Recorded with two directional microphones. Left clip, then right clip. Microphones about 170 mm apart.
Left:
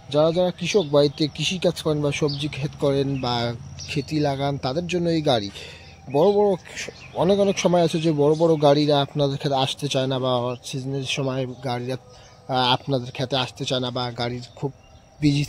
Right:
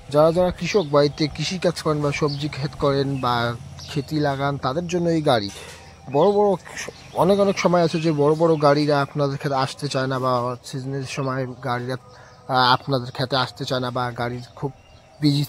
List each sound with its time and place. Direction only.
0.1 s speech: 10° right (ahead or behind)
0.7 s speech: centre (ahead or behind)
1.3 s speech: 30° right (ahead or behind)
1.6 s speech: centre (ahead or behind)
4.8 s speech: centre (ahead or behind)